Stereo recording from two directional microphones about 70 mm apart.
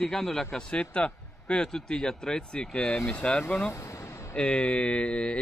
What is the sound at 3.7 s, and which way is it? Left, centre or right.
Vehicle, left.